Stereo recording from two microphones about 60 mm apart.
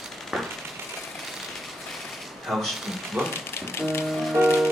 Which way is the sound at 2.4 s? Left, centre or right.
Centre.